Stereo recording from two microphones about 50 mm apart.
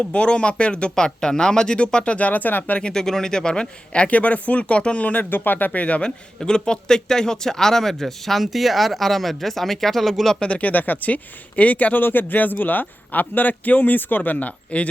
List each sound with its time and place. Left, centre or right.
0.0 s speech: left
2.7 s speech: centre
5.3 s a man's voice: left; by 10.3 s centre
10.4 s a man's voice: left